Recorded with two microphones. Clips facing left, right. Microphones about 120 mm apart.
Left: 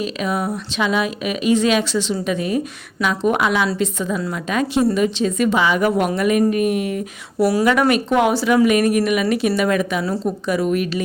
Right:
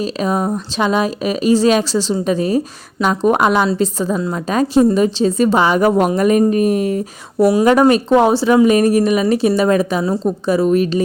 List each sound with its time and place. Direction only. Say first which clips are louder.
0.0 s speech: right 4 dB; 35° right (ahead or behind)